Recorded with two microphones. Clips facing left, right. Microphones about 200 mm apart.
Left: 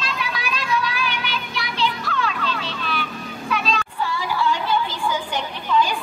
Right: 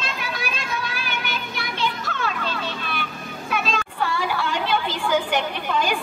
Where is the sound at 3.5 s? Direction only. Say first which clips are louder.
Left 1 dB; 50° right (ahead or behind); by 5.2 s 70° right (ahead or behind).